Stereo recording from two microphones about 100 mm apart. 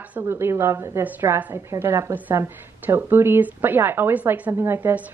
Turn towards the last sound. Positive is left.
turn(degrees=-25)  # may be behind; listen again after turning